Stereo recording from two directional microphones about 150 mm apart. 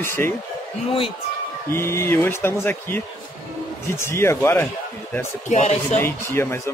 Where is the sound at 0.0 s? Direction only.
15° left (ahead or behind).